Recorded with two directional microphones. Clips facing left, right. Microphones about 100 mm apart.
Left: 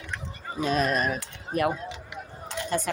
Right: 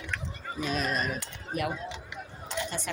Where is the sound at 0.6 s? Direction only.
45° left (ahead or behind).